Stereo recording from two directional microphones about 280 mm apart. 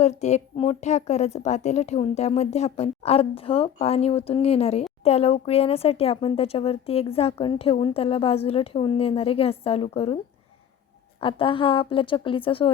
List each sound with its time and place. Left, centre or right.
0.0 s a woman's voice: left
11.2 s a woman's voice: centre